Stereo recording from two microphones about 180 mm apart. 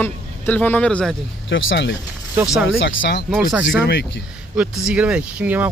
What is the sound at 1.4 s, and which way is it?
Speech, 85° left.